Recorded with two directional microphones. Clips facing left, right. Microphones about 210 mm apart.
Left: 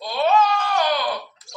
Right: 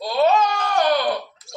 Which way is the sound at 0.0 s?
40° right (ahead or behind).